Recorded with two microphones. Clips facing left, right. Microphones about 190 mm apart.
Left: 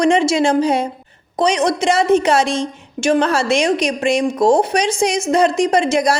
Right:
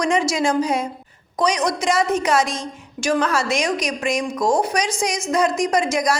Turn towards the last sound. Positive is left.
turn(degrees=30)  # may be behind; listen again after turning